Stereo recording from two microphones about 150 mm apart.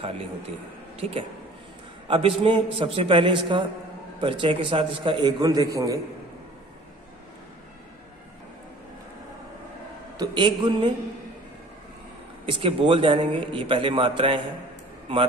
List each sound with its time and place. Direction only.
2.0 s a man's voice: 35° right (ahead or behind)
10.1 s a man's voice: 30° right (ahead or behind)
12.4 s a man's voice: 35° right (ahead or behind)